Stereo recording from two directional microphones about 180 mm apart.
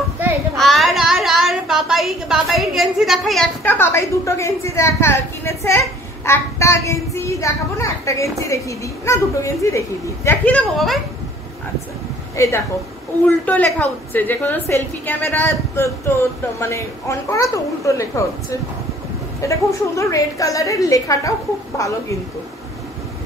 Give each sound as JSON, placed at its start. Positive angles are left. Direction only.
{"t": 0.6, "sound": "a child's voice", "side_deg": 0}
{"t": 12.4, "sound": "a child's voice", "side_deg": 15}
{"t": 19.4, "sound": "a child's voice", "side_deg": 15}